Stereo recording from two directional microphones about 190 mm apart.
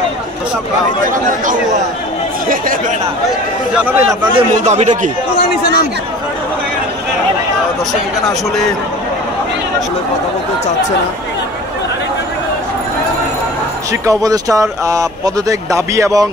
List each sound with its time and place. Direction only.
2.4 s speech: 45° right (ahead or behind)
3.7 s a man's voice: 10° right (ahead or behind)
4.4 s a man's voice: 35° right (ahead or behind)
14.0 s a man's voice: 20° right (ahead or behind)